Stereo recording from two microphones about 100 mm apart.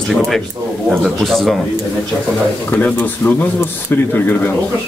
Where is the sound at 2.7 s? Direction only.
15° left (ahead or behind).